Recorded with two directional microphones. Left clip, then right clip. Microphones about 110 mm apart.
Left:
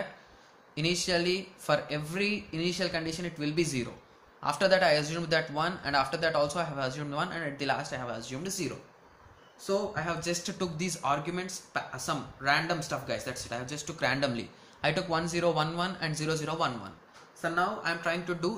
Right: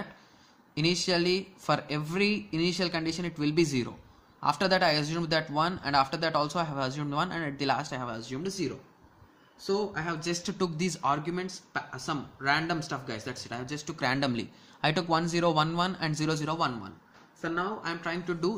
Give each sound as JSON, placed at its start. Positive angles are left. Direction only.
{"t": 0.7, "sound": "speech", "side_deg": -65}
{"t": 16.5, "sound": "speech", "side_deg": -45}
{"t": 17.4, "sound": "speech", "side_deg": -25}